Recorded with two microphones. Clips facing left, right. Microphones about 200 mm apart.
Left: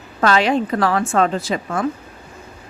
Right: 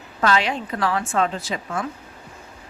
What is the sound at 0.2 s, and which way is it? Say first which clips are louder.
Speech: left 5 dB; 45° left (ahead or behind).